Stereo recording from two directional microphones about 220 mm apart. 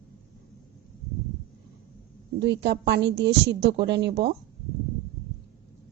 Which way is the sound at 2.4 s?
50° right (ahead or behind).